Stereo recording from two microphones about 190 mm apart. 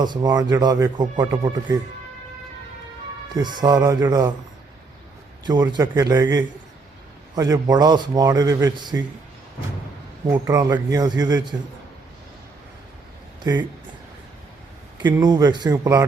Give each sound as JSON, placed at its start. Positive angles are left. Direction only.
{"t": 0.0, "sound": "speech", "side_deg": -20}
{"t": 3.3, "sound": "speech", "side_deg": -20}
{"t": 5.5, "sound": "speech", "side_deg": -20}
{"t": 10.2, "sound": "speech", "side_deg": -15}
{"t": 13.4, "sound": "speech", "side_deg": -20}
{"t": 15.0, "sound": "speech", "side_deg": -20}